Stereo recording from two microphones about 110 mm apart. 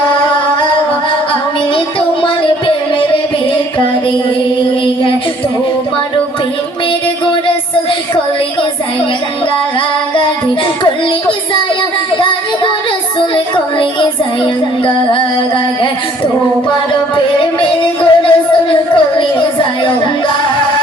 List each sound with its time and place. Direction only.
13.3 s child singing: 45° left (ahead or behind)
17.2 s music: 50° left (ahead or behind)